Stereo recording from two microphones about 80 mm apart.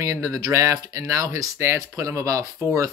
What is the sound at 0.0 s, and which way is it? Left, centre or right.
Speech, right.